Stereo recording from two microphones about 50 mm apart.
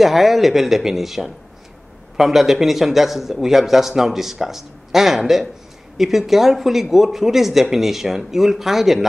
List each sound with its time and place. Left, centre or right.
0.0 s a man's voice: centre